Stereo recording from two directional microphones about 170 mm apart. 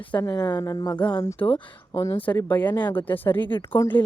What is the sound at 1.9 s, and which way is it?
Speech, 20° left (ahead or behind).